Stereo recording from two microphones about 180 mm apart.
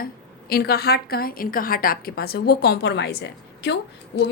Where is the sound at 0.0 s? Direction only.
55° left (ahead or behind).